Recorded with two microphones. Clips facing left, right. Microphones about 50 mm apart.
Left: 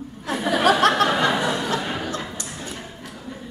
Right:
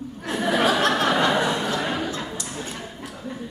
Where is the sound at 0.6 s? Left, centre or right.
Left.